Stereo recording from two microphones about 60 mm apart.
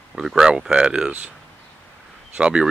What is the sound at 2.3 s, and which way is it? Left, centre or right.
Speech, centre.